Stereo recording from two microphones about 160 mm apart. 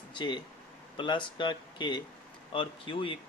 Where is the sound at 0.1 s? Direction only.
30° left (ahead or behind).